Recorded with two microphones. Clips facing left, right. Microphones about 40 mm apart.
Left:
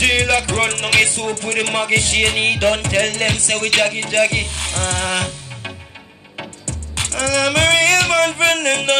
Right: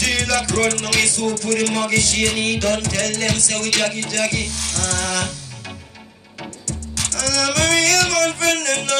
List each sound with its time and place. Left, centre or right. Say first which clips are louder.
0.0 s music: left 4 dB; left
6.6 s music: left 1 dB; left